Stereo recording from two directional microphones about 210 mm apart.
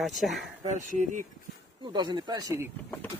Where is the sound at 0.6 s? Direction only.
35° right (ahead or behind).